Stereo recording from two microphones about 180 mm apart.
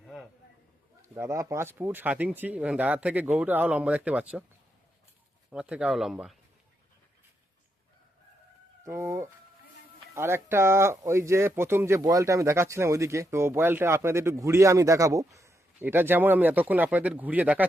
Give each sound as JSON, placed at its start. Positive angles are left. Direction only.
{"t": 0.0, "sound": "a sound", "side_deg": 0}
{"t": 1.0, "sound": "speech", "side_deg": -15}
{"t": 5.5, "sound": "speech", "side_deg": -5}
{"t": 8.8, "sound": "speech", "side_deg": -15}